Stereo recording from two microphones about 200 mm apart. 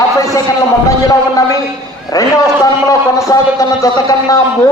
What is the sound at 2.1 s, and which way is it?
A man's voice, 15° left (ahead or behind).